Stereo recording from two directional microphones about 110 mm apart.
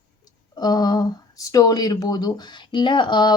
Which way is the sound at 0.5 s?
40° left (ahead or behind).